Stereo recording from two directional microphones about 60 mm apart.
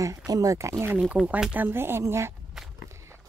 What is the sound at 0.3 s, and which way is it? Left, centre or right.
A woman's voice, right.